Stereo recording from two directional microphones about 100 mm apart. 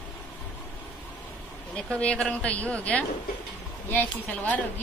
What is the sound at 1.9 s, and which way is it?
Speech, 10° left (ahead or behind).